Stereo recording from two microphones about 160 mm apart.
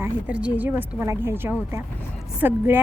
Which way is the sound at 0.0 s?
10° right (ahead or behind).